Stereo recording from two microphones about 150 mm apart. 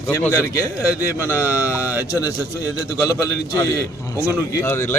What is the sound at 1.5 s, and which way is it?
Speech, 20° left (ahead or behind).